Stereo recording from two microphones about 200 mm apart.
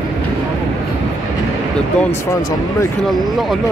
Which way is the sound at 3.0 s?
Centre (ahead or behind).